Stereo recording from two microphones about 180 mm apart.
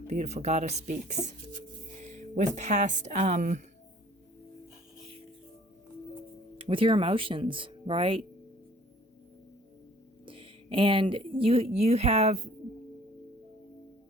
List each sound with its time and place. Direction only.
0.1 s speech: 40° right (ahead or behind)
6.6 s speech: 30° right (ahead or behind)
10.2 s speech: 30° right (ahead or behind)